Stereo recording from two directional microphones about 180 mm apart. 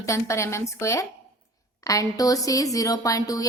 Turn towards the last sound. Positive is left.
turn(degrees=20)  # may be behind; listen again after turning